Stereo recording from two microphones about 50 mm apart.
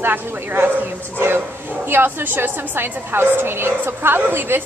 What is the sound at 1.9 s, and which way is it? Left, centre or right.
A woman's voice, right.